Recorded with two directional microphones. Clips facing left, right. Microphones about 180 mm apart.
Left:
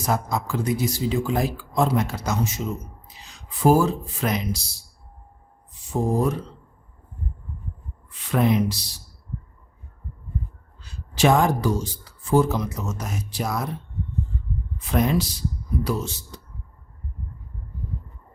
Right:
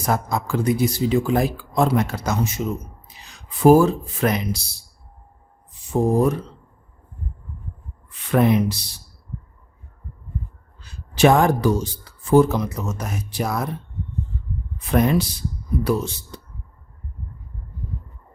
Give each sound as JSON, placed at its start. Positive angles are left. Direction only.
{"t": 0.0, "sound": "speech", "side_deg": -55}
{"t": 5.9, "sound": "speech", "side_deg": -60}
{"t": 8.3, "sound": "speech", "side_deg": -60}
{"t": 11.1, "sound": "speech", "side_deg": -60}
{"t": 14.8, "sound": "a man's voice", "side_deg": -55}